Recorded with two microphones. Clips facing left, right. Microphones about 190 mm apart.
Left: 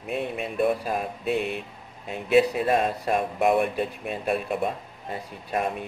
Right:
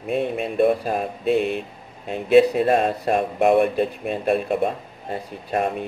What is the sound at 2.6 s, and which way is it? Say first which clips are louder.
Speech: right 4 dB; 40° right (ahead or behind).